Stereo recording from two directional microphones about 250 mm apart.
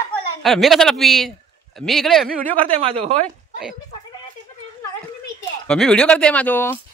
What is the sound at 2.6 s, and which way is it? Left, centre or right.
Speech, right.